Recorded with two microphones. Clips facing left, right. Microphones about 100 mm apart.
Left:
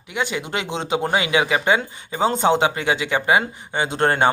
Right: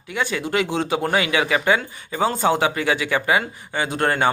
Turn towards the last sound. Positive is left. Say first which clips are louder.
# left 2 dB
turn(degrees=25)  # may be behind; listen again after turning